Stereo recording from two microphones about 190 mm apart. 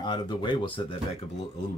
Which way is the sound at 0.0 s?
25° left (ahead or behind).